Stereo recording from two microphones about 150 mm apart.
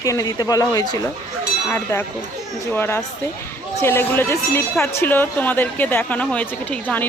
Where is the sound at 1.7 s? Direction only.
15° left (ahead or behind).